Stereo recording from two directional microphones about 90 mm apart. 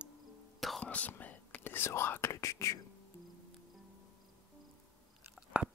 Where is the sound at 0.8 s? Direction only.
15° left (ahead or behind); by 2.8 s 35° left (ahead or behind).